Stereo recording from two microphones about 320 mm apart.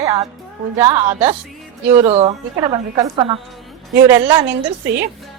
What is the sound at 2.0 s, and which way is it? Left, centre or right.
A woman's voice, centre.